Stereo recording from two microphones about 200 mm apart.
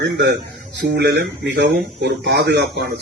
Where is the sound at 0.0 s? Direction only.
60° right (ahead or behind).